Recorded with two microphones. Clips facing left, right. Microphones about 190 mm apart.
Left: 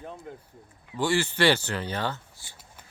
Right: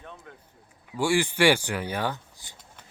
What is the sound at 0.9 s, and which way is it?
A man's voice, 10° right (ahead or behind).